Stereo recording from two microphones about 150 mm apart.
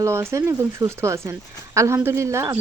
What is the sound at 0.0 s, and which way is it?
Speech, 20° right (ahead or behind).